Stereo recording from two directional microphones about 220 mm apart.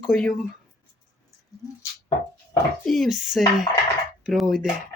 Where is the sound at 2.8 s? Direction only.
Centre (ahead or behind).